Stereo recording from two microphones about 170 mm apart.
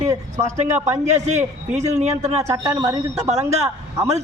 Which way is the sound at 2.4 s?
20° right (ahead or behind).